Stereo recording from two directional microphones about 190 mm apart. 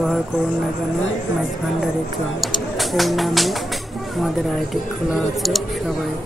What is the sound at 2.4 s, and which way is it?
Speech, centre (ahead or behind).